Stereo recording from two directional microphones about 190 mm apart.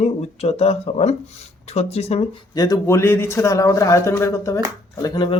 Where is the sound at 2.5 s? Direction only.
20° left (ahead or behind).